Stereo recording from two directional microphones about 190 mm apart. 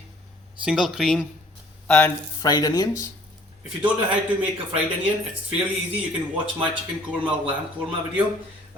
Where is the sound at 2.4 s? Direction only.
20° left (ahead or behind).